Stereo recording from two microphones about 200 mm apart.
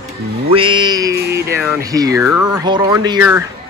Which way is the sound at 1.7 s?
15° right (ahead or behind).